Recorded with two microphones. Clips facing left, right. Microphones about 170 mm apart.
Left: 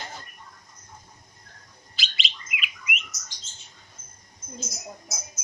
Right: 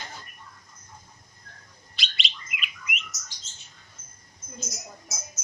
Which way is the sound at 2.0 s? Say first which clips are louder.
Even; centre (ahead or behind).